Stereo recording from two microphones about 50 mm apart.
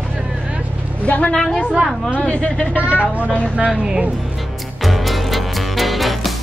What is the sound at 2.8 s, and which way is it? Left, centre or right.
Speech, right.